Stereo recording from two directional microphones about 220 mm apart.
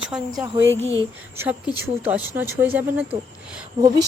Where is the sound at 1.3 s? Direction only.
10° right (ahead or behind).